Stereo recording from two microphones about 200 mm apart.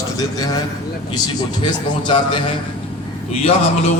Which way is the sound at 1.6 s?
25° left (ahead or behind).